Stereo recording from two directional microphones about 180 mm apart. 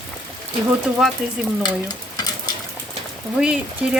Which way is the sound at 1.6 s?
20° left (ahead or behind).